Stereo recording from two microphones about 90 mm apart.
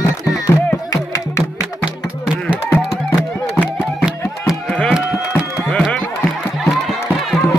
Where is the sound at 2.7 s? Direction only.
30° left (ahead or behind).